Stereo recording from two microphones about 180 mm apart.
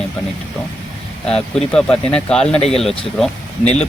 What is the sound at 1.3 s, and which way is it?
A man's voice, 5° left (ahead or behind).